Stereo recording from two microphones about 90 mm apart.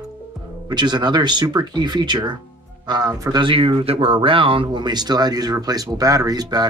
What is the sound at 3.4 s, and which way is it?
Speech, 80° right.